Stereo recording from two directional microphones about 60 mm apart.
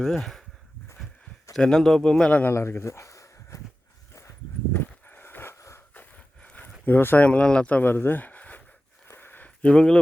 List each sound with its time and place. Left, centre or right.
0.0 s speech: centre
1.5 s a man's voice: centre
2.5 s speech: left
4.7 s horse: left
5.5 s a sound: left
6.1 s dog: left
6.8 s speech: left
7.3 s speech: centre
7.7 s speech: left
9.0 s a sound: left; by 10.0 s centre